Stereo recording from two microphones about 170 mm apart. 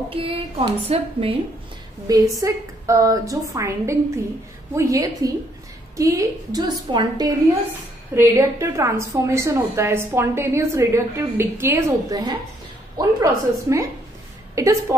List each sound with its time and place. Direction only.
0.1 s a woman's voice: 35° right (ahead or behind)
2.0 s a woman's voice: 20° right (ahead or behind)